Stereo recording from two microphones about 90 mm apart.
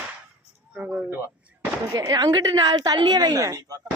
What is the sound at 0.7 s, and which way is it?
Speech, 15° right (ahead or behind).